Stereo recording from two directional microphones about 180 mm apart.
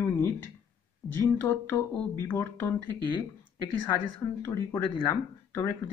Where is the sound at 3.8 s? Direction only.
15° left (ahead or behind).